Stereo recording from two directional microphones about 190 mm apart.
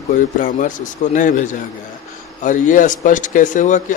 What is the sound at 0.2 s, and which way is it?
Speech, 45° left (ahead or behind).